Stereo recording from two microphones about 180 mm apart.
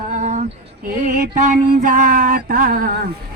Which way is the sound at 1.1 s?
45° right (ahead or behind).